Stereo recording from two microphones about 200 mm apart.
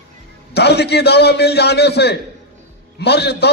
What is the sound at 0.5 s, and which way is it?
A man's voice, 55° left (ahead or behind).